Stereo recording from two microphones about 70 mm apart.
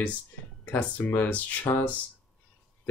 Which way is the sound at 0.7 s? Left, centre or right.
Left.